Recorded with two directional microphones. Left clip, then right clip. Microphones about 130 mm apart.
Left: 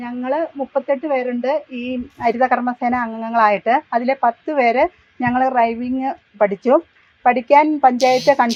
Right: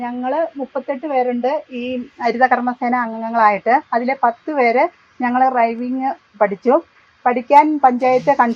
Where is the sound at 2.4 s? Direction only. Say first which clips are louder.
Right 4 dB; centre (ahead or behind); by 8.5 s 20° left (ahead or behind).